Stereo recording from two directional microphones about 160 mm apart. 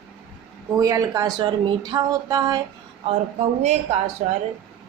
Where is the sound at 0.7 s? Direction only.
20° right (ahead or behind).